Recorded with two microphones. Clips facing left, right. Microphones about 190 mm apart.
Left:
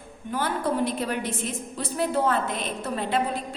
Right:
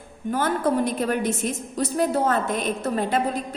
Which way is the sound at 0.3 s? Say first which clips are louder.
Right 4 dB; 45° right (ahead or behind).